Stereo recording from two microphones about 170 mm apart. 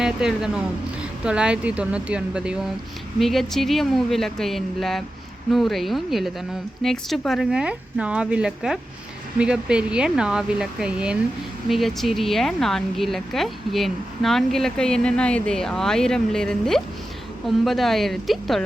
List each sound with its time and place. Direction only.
0.0 s speech: 5° right (ahead or behind)